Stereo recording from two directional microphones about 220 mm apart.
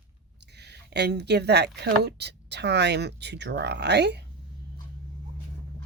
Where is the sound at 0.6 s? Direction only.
50° right (ahead or behind).